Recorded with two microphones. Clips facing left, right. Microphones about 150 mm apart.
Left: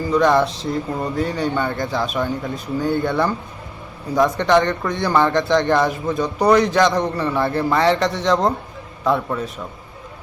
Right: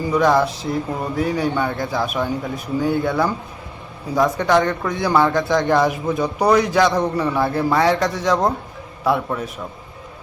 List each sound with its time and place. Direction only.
0.1 s speech: 5° right (ahead or behind)